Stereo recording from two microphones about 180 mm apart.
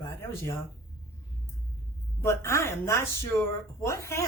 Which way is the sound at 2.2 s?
15° left (ahead or behind).